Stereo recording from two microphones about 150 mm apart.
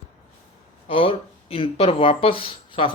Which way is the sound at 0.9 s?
40° left (ahead or behind).